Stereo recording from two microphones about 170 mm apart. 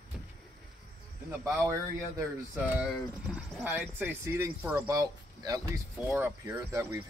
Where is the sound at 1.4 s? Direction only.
15° right (ahead or behind).